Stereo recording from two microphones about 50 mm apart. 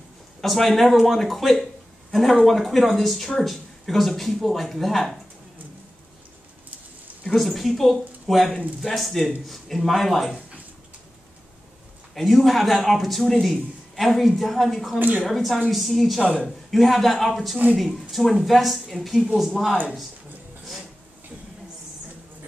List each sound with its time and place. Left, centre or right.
0.4 s speech: centre
7.3 s speech: centre
12.1 s speech: centre
15.0 s a woman's voice: right
15.2 s speech: centre